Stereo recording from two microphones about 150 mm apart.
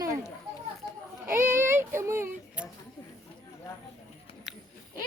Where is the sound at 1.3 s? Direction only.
15° right (ahead or behind).